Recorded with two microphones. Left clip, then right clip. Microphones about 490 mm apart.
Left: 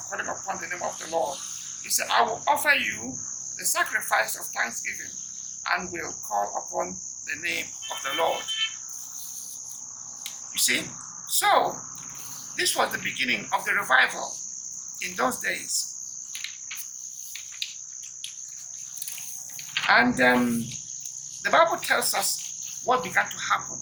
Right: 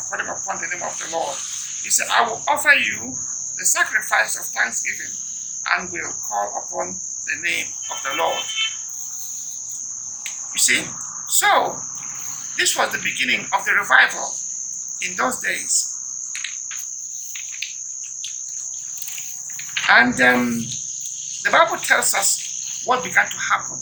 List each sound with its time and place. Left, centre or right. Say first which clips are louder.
0.2 s a man's voice: right 4 dB; left
10.6 s a man's voice: right 6 dB; left
19.7 s a man's voice: right 6 dB; left